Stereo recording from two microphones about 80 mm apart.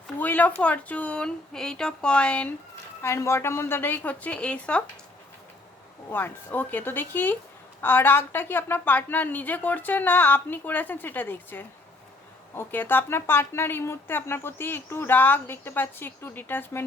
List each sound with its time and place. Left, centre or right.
0.2 s speech: left
3.0 s speech: left; by 4.8 s centre
6.1 s speech: left